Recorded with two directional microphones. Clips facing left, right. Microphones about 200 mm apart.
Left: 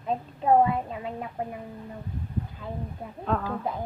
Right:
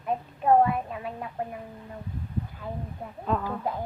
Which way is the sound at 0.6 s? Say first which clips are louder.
Even; 25° left (ahead or behind).